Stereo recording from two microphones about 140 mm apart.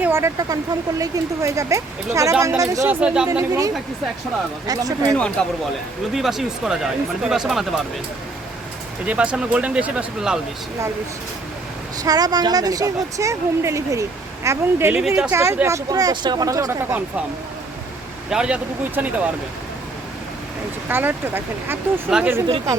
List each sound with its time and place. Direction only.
0.0 s speech: 20° right (ahead or behind)
2.8 s speech: 10° right (ahead or behind)
3.3 s speech: 20° right (ahead or behind)
5.1 s speech: 5° left (ahead or behind)
9.0 s speech: 10° right (ahead or behind)
12.0 s speech: 25° right (ahead or behind)
14.9 s speech: 5° right (ahead or behind)
15.3 s speech: 20° right (ahead or behind)
18.3 s speech: 5° right (ahead or behind)
20.8 s speech: 15° right (ahead or behind)